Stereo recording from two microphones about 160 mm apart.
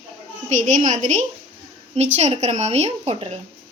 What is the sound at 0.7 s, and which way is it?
A woman's voice, 55° right (ahead or behind).